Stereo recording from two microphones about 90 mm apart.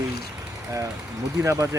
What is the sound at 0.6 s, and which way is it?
Speech, 35° right (ahead or behind).